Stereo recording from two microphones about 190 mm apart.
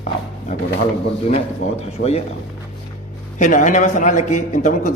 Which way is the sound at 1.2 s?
30° left (ahead or behind).